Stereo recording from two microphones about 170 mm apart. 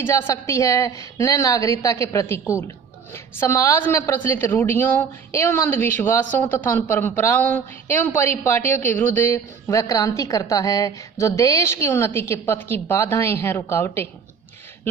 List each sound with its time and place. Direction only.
0.0 s a woman's voice: 15° left (ahead or behind)